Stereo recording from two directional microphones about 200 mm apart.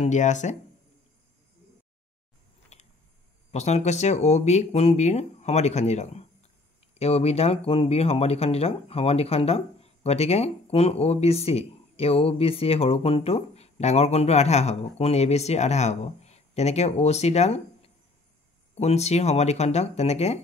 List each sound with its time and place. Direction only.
0.0 s speech: 35° left (ahead or behind)
2.7 s a sound: 35° left (ahead or behind)
3.5 s speech: 35° left (ahead or behind)